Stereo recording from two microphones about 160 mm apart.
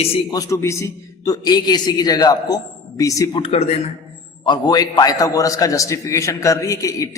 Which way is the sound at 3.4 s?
35° left (ahead or behind).